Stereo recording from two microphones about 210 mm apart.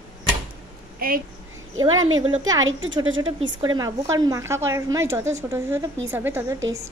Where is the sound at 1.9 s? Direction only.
70° right (ahead or behind).